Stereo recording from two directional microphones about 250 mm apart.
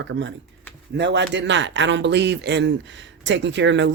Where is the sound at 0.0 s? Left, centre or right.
Right.